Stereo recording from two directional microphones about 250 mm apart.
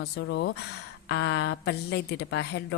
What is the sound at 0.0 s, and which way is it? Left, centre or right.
A woman's voice, left.